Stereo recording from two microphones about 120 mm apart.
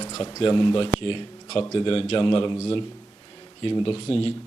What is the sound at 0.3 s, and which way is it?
A man's voice, 45° left (ahead or behind).